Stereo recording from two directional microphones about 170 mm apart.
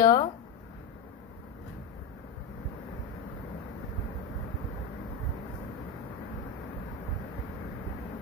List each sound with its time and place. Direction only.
0.0 s speech: 25° left (ahead or behind)